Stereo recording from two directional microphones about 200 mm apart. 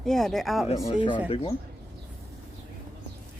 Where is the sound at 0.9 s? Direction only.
25° left (ahead or behind).